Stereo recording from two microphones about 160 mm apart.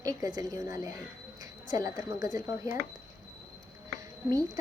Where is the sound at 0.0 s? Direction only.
20° right (ahead or behind).